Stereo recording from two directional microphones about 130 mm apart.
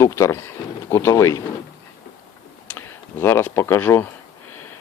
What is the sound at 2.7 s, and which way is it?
Speech, 20° left (ahead or behind).